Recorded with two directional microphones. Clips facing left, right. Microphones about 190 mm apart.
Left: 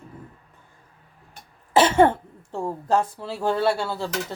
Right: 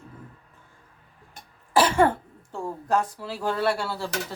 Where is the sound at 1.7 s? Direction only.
25° left (ahead or behind).